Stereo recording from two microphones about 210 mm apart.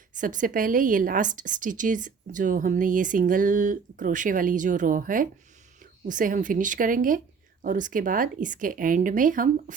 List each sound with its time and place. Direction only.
0.1 s a woman's voice: 40° right (ahead or behind)